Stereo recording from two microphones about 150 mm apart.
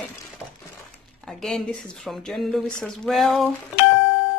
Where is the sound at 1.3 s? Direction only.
Centre (ahead or behind).